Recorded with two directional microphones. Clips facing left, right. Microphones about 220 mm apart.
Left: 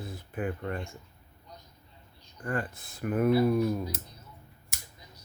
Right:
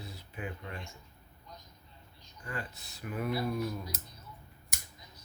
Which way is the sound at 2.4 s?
50° left (ahead or behind).